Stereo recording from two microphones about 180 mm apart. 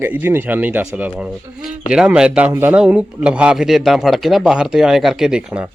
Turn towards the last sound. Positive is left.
turn(degrees=-5)  # may be behind; listen again after turning